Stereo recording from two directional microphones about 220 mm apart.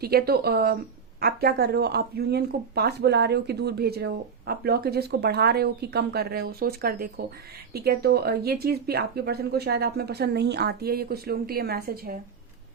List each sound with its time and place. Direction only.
0.0 s speech: 45° right (ahead or behind)